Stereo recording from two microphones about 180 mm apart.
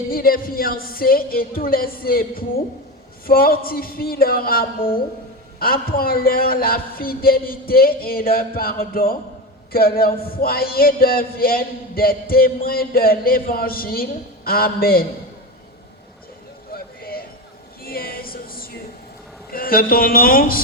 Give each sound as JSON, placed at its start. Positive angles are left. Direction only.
{"t": 0.1, "sound": "speech", "side_deg": 55}
{"t": 16.7, "sound": "a sound", "side_deg": 55}
{"t": 17.8, "sound": "music", "side_deg": 55}
{"t": 19.5, "sound": "speech", "side_deg": 55}